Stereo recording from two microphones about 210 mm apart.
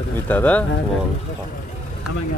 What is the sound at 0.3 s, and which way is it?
Speech, 5° left (ahead or behind).